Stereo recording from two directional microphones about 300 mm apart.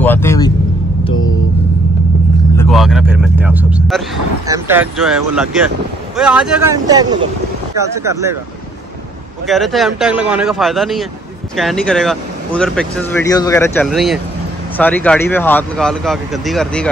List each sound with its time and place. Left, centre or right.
0.0 s vehicle: centre
2.5 s vehicle: centre
4.5 s speech: centre
9.5 s speech: centre